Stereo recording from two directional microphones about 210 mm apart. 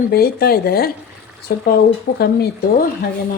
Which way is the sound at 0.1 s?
45° left (ahead or behind).